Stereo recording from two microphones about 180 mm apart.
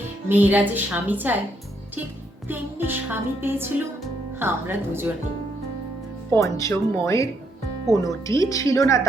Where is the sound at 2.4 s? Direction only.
10° right (ahead or behind).